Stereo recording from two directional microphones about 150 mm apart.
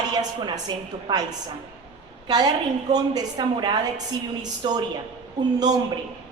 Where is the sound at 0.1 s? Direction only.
25° right (ahead or behind).